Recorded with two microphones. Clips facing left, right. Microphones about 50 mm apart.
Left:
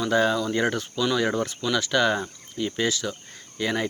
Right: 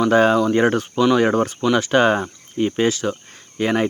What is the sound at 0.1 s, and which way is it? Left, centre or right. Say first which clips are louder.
Speech: right 5 dB; right.